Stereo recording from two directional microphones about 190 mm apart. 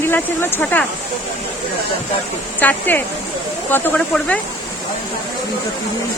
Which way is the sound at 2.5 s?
10° left (ahead or behind).